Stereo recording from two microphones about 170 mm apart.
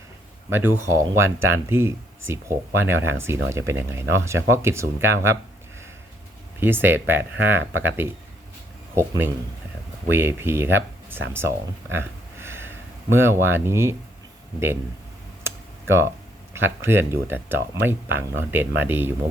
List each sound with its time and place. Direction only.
0.5 s speech: 15° right (ahead or behind)
6.6 s speech: 10° right (ahead or behind)
15.4 s computer keyboard: 15° right (ahead or behind)
16.5 s speech: 15° right (ahead or behind)